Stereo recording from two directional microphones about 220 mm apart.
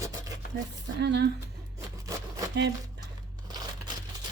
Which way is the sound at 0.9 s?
50° right (ahead or behind).